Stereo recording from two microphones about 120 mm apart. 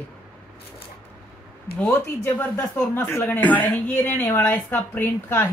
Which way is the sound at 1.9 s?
25° left (ahead or behind).